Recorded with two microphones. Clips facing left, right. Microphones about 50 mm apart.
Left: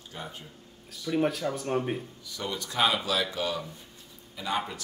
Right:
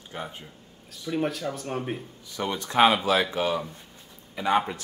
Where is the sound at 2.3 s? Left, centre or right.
Right.